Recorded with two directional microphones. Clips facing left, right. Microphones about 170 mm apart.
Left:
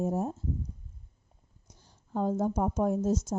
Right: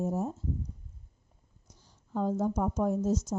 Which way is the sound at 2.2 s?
50° left (ahead or behind).